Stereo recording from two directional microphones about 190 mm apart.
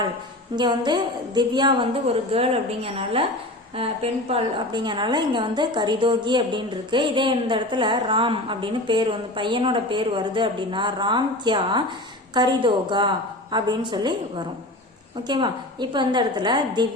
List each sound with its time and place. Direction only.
0.5 s a woman's voice: 25° right (ahead or behind)